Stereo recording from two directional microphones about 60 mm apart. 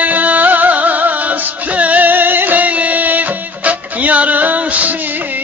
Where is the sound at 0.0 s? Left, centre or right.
Right.